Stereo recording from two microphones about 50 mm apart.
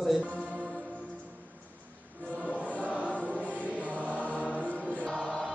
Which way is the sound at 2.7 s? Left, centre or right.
Left.